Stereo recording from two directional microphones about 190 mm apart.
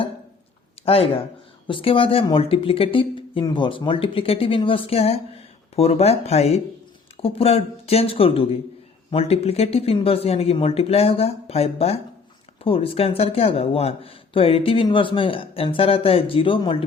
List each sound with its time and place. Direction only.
0.9 s speech: 30° left (ahead or behind)